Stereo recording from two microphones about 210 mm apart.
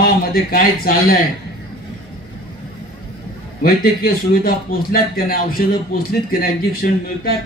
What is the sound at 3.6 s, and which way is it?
A man's voice, 45° left (ahead or behind).